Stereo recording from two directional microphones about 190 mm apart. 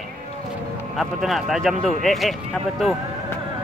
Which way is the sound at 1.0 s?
Centre (ahead or behind).